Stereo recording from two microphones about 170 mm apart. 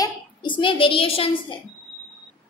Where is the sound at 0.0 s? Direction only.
25° left (ahead or behind).